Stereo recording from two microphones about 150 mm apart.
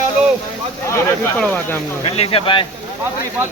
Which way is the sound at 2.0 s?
35° left (ahead or behind).